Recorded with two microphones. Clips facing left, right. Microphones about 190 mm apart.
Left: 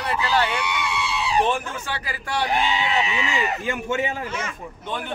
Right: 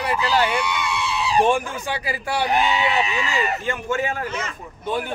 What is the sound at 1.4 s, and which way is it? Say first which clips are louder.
A man's voice: right 4 dB; 10° right (ahead or behind).